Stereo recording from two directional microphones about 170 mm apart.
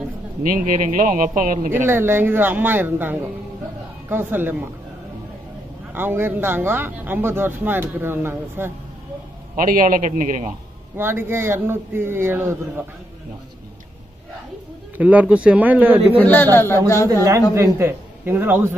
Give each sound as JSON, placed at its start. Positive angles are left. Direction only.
{"t": 0.4, "sound": "speech", "side_deg": -50}
{"t": 1.9, "sound": "speech", "side_deg": -15}
{"t": 5.9, "sound": "speech", "side_deg": -10}
{"t": 9.6, "sound": "speech", "side_deg": -50}
{"t": 11.0, "sound": "speech", "side_deg": -15}
{"t": 15.0, "sound": "speech", "side_deg": -10}
{"t": 16.2, "sound": "a man's voice", "side_deg": 10}
{"t": 17.1, "sound": "speech", "side_deg": -20}